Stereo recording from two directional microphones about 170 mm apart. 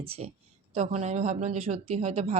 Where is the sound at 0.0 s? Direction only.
35° right (ahead or behind).